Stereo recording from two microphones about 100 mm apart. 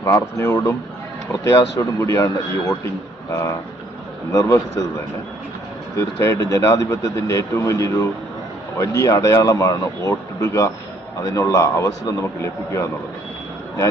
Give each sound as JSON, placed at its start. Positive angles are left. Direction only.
{"t": 0.0, "sound": "speech", "side_deg": 30}
{"t": 4.3, "sound": "speech", "side_deg": 35}
{"t": 6.0, "sound": "speech", "side_deg": 30}